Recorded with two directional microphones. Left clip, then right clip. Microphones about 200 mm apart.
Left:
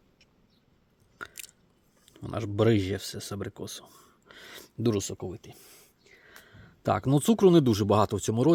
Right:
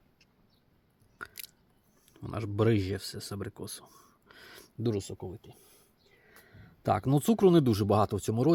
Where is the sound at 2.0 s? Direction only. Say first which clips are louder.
Left 4 dB; 10° left (ahead or behind).